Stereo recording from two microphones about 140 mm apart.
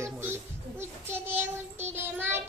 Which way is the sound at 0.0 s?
15° right (ahead or behind).